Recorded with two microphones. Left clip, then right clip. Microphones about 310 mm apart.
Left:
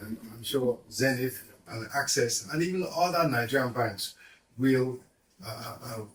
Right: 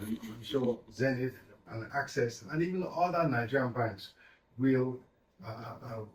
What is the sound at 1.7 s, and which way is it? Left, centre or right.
Speech, centre.